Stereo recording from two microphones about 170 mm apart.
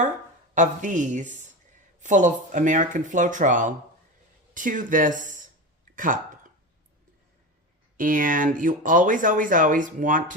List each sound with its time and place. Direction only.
0.5 s speech: 45° right (ahead or behind)
7.9 s speech: 55° right (ahead or behind)